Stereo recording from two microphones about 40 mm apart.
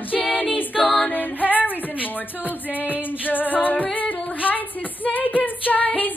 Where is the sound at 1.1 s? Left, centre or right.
Left.